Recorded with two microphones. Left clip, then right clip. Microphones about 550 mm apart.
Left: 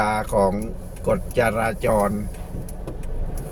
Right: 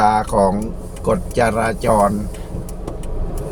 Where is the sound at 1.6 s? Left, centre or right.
Left.